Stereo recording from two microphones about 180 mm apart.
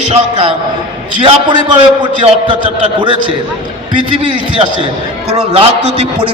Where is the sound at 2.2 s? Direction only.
30° right (ahead or behind).